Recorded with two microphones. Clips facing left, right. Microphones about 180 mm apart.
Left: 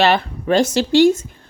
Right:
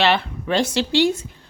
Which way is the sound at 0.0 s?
45° left (ahead or behind).